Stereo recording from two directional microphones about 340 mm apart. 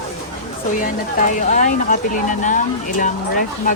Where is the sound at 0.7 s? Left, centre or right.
Left.